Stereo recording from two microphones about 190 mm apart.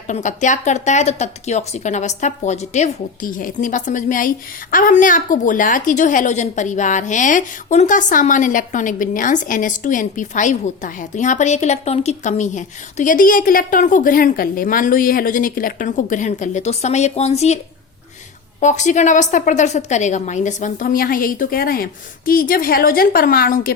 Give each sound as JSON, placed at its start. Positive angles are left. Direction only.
{"t": 0.1, "sound": "speech", "side_deg": 40}
{"t": 18.6, "sound": "a woman's voice", "side_deg": 40}